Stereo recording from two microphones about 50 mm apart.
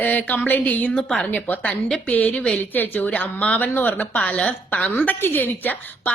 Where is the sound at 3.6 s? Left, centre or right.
Left.